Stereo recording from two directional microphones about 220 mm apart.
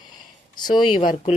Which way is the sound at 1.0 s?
40° left (ahead or behind).